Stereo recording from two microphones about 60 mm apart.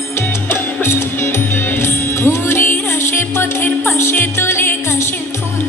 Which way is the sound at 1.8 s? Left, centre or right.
Left.